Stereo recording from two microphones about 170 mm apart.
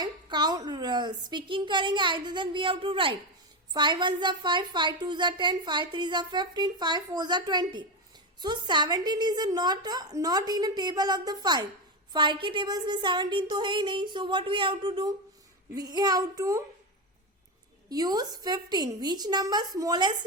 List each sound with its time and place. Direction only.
0.0 s a woman's voice: 25° right (ahead or behind)
17.8 s a woman's voice: 20° right (ahead or behind)